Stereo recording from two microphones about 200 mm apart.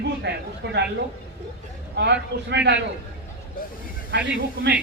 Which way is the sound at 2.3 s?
55° right (ahead or behind).